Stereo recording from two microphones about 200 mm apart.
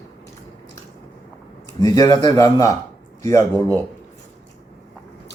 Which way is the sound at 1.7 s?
20° left (ahead or behind).